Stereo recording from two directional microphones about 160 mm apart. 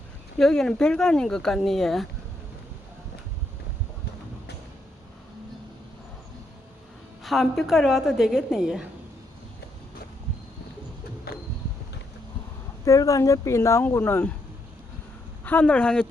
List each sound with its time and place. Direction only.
0.3 s speech: 5° left (ahead or behind)
7.2 s speech: centre (ahead or behind)
11.3 s a sound: 75° left (ahead or behind)
12.8 s speech: 20° left (ahead or behind)
15.4 s speech: 10° left (ahead or behind)